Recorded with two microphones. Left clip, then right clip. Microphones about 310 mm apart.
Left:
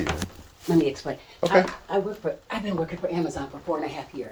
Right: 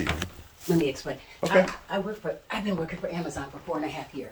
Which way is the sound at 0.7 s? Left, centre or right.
Centre.